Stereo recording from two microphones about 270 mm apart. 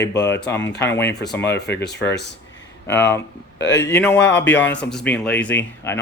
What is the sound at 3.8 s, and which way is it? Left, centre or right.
Speech, centre.